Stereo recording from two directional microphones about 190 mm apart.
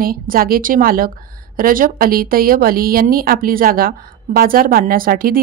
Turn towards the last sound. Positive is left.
turn(degrees=-50)  # may be behind; listen again after turning